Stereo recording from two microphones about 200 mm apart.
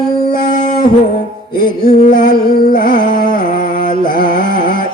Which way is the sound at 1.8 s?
45° left (ahead or behind).